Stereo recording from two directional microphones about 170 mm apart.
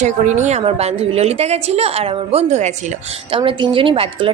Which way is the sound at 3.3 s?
30° right (ahead or behind).